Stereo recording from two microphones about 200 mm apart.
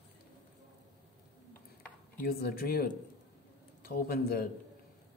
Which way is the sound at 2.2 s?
50° left (ahead or behind).